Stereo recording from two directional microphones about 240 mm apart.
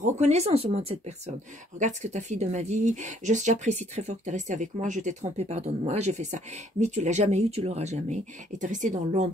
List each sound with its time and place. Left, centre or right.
0.0 s speech: right